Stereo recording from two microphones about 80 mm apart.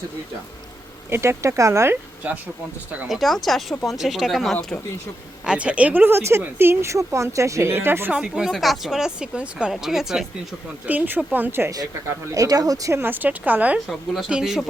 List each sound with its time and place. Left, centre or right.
1.1 s speech: right
3.1 s speech: centre
5.5 s speech: centre
6.1 s speech: right
8.1 s speech: centre
10.8 s speech: right
12.0 s speech: right
12.9 s speech: right
13.7 s speech: centre